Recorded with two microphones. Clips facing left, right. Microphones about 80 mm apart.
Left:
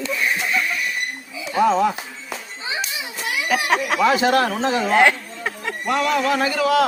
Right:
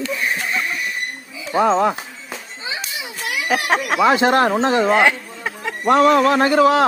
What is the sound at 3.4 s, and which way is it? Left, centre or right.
Speech, right.